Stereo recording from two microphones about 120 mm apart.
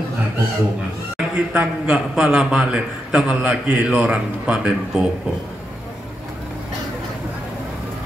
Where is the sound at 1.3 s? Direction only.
10° right (ahead or behind).